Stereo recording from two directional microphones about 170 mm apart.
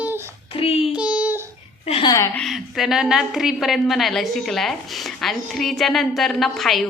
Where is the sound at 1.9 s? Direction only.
35° left (ahead or behind).